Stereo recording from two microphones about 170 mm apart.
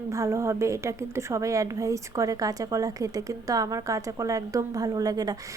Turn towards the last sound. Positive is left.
turn(degrees=-20)  # may be behind; listen again after turning